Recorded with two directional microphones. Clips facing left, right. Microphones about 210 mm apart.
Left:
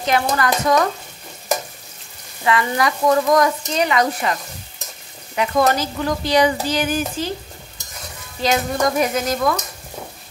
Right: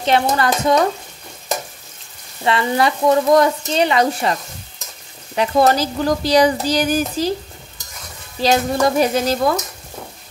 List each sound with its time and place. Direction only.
0.0 s speech: 30° right (ahead or behind)
2.4 s speech: 30° right (ahead or behind)
8.4 s speech: 30° right (ahead or behind)